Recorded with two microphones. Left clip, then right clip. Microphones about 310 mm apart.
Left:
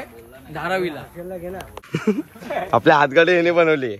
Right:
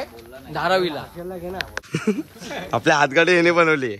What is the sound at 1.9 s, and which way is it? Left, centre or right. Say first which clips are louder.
A man's voice: left 5 dB; centre.